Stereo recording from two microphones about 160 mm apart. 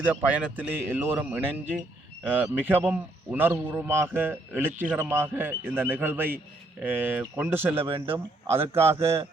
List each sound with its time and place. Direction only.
0.0 s a man's voice: 10° right (ahead or behind)
7.8 s a man's voice: 35° right (ahead or behind)
9.0 s a man's voice: 15° right (ahead or behind)